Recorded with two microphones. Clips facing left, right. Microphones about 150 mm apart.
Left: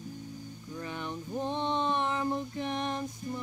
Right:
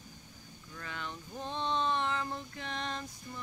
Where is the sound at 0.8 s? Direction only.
20° left (ahead or behind).